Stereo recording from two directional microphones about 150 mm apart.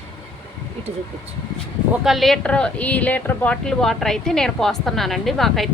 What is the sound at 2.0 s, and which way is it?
Speech, centre (ahead or behind).